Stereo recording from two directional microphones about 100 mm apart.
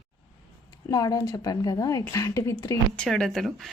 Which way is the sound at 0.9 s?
40° left (ahead or behind).